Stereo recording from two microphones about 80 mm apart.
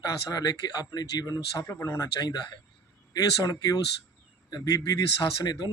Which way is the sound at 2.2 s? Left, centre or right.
Left.